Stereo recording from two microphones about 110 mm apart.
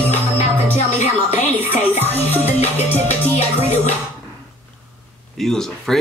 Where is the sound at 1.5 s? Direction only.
15° right (ahead or behind).